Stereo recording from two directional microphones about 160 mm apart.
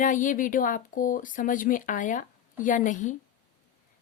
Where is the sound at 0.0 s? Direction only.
55° left (ahead or behind).